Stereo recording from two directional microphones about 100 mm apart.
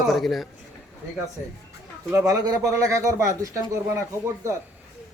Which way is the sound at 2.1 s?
30° right (ahead or behind).